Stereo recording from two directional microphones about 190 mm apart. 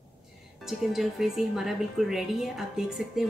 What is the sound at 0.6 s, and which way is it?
A woman's voice, centre (ahead or behind).